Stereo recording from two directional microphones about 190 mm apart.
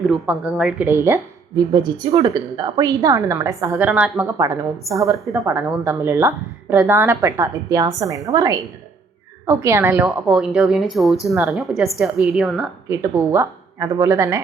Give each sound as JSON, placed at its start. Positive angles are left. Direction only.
{"t": 0.0, "sound": "a woman's voice", "side_deg": 0}
{"t": 12.9, "sound": "a woman's voice", "side_deg": -15}